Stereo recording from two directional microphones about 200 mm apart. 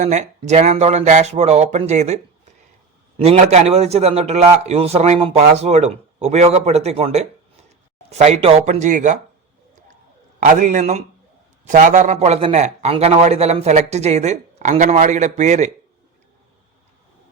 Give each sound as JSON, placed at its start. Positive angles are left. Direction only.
{"t": 0.0, "sound": "a man's voice", "side_deg": -35}
{"t": 3.2, "sound": "a man's voice", "side_deg": -35}
{"t": 8.7, "sound": "a man's voice", "side_deg": -40}
{"t": 10.4, "sound": "a man's voice", "side_deg": -40}